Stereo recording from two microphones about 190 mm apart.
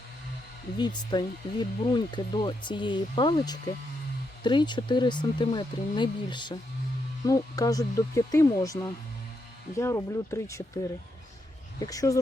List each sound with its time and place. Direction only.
0.8 s speech: 25° left (ahead or behind)
11.8 s speech: 20° left (ahead or behind)